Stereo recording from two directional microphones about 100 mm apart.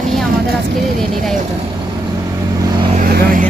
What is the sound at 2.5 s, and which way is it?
Vehicle, 45° right (ahead or behind).